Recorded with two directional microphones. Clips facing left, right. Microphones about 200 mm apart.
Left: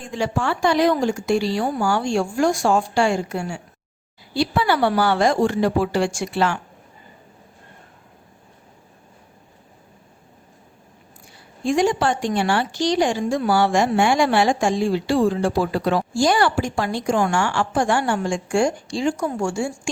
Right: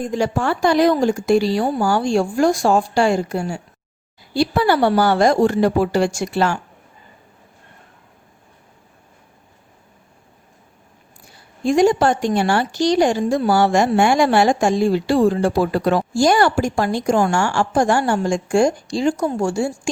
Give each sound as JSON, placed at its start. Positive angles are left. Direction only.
{"t": 0.0, "sound": "a woman's voice", "side_deg": -40}
{"t": 11.6, "sound": "a woman's voice", "side_deg": -40}